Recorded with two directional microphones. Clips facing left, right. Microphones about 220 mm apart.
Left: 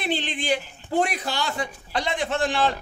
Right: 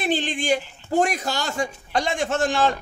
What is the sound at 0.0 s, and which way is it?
Speech, 45° right (ahead or behind).